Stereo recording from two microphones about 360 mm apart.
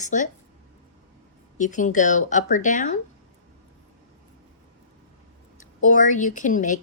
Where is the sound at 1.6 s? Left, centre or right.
Left.